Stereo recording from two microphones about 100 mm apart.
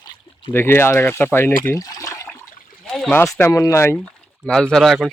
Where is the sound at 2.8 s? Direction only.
10° left (ahead or behind).